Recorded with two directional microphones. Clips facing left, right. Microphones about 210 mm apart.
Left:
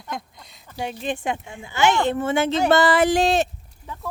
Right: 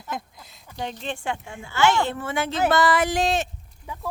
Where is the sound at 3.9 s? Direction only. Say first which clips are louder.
Even; 10° right (ahead or behind).